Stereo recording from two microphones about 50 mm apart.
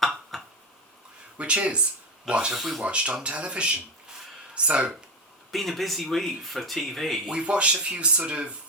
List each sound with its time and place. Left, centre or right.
0.0 s a sound: centre
1.4 s speech: right
2.6 s speech: centre
2.8 s speech: right
5.5 s speech: centre
7.3 s speech: right